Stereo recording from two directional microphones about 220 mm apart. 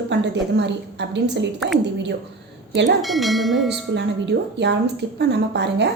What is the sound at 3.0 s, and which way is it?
Speech, centre (ahead or behind).